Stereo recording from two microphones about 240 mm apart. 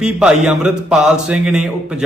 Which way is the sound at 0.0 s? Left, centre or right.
Centre.